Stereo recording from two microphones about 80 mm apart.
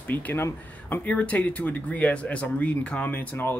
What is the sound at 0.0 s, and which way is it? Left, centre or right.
Speech, left.